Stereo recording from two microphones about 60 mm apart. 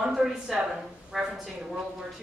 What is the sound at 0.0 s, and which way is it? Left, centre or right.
Speech, centre.